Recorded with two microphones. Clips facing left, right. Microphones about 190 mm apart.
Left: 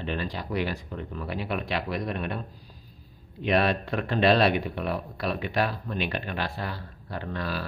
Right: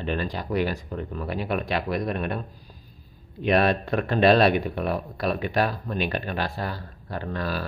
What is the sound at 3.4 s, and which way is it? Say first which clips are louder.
Speech: right 3 dB; 50° right (ahead or behind).